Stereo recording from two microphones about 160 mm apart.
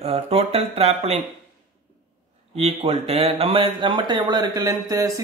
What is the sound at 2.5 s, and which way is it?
Speech, 40° right (ahead or behind).